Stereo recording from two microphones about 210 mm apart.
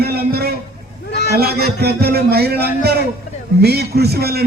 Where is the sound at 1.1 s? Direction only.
55° left (ahead or behind).